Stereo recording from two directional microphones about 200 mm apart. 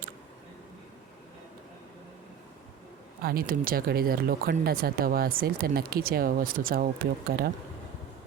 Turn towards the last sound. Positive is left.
turn(degrees=-55)  # may be behind; listen again after turning